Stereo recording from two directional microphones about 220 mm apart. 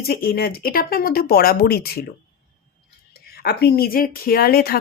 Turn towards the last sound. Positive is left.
turn(degrees=45)  # may be behind; listen again after turning